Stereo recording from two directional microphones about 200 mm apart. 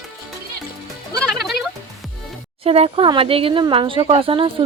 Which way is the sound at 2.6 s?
30° right (ahead or behind).